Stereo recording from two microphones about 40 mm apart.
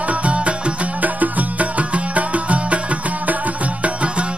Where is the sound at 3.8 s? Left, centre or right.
Right.